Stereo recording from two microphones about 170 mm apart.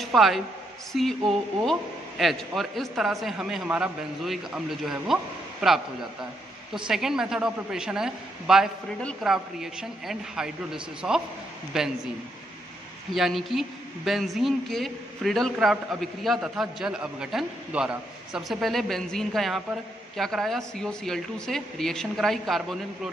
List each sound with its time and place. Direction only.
0.0 s a woman's voice: centre (ahead or behind)
6.9 s a woman's voice: centre (ahead or behind)
13.1 s a woman's voice: centre (ahead or behind)